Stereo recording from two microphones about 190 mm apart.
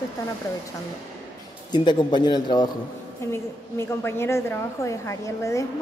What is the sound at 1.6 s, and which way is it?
A woman's voice, 25° left (ahead or behind).